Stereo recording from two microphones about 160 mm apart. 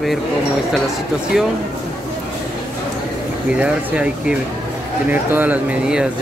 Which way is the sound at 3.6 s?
5° right (ahead or behind).